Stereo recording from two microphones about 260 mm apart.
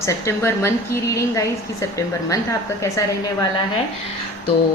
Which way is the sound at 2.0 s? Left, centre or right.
Centre.